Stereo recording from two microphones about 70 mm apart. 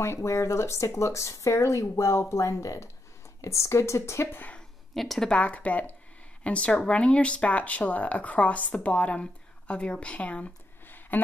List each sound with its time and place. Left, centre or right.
0.0 s speech: left
4.9 s a woman's voice: centre
5.4 s speech: left